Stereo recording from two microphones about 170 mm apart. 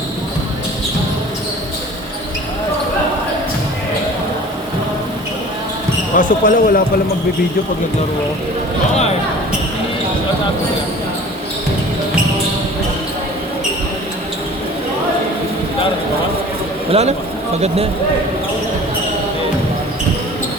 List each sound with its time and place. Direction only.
6.1 s speech: 50° left (ahead or behind)
16.9 s a man's voice: 40° right (ahead or behind)